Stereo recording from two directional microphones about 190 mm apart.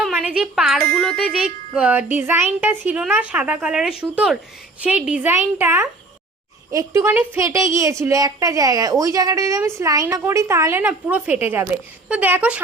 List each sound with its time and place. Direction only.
0.0 s speech: 5° right (ahead or behind)
1.1 s music: centre (ahead or behind)
1.7 s a woman's voice: 5° right (ahead or behind)
4.1 s music: 5° right (ahead or behind)
4.8 s a woman's voice: 5° right (ahead or behind)